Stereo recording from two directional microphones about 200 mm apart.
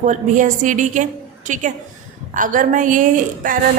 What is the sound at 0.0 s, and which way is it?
A woman's voice, 40° right (ahead or behind).